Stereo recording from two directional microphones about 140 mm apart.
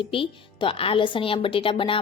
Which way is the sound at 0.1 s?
40° left (ahead or behind).